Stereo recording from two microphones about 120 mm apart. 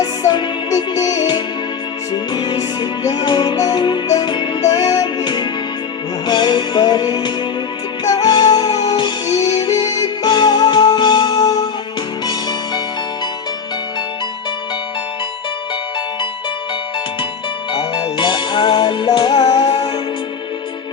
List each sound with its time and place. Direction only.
0.0 s music: 35° left (ahead or behind)
17.7 s music: 35° left (ahead or behind)